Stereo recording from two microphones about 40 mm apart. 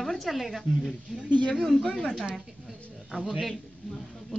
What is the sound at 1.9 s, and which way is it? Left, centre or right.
Speech, left.